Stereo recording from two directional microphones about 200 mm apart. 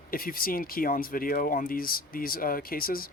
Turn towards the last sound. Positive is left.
turn(degrees=45)  # may be behind; listen again after turning